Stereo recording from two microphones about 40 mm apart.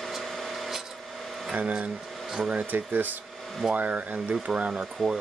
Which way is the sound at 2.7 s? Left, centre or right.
Right.